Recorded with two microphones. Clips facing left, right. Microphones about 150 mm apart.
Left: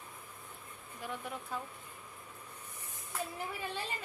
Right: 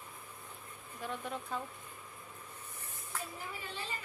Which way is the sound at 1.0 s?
10° left (ahead or behind).